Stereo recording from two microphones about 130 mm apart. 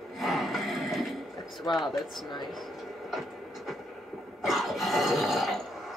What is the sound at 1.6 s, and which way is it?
Speech, centre (ahead or behind).